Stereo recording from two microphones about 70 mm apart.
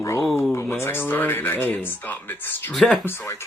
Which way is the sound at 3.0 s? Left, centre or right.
Left.